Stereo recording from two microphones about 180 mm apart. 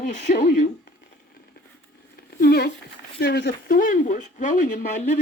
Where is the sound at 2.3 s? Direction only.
60° left (ahead or behind).